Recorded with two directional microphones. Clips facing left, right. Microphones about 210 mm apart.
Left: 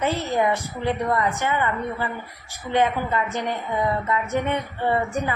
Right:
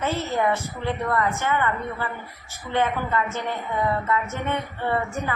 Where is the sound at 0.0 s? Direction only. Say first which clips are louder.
Left 2 dB; 15° left (ahead or behind).